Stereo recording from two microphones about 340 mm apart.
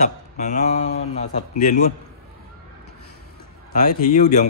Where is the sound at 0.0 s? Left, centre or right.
Left.